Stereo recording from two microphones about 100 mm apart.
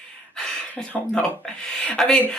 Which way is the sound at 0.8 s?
10° left (ahead or behind).